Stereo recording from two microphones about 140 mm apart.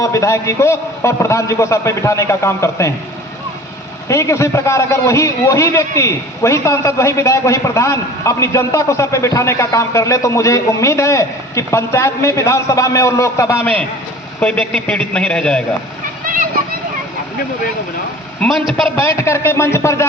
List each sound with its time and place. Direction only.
0.0 s a man's voice: 20° left (ahead or behind)
4.1 s a man's voice: 20° left (ahead or behind)
16.3 s a sound: 85° right
18.4 s a man's voice: 10° left (ahead or behind)
18.9 s a man's voice: 20° left (ahead or behind)